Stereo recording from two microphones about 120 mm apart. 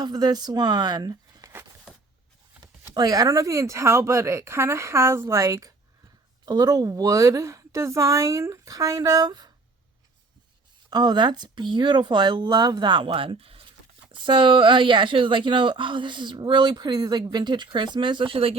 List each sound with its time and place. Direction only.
0.0 s speech: 35° right (ahead or behind)
2.9 s a woman's voice: 30° right (ahead or behind)
10.8 s speech: 35° right (ahead or behind)